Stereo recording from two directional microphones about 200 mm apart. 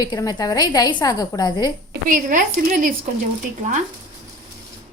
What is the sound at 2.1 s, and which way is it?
Speech, 45° right (ahead or behind).